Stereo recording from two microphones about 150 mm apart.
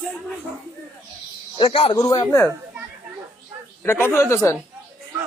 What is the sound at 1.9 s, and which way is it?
Speech, 25° left (ahead or behind).